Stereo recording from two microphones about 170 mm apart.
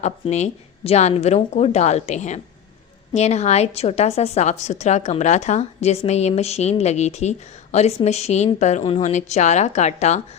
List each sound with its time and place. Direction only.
0.0 s a woman's voice: 40° left (ahead or behind)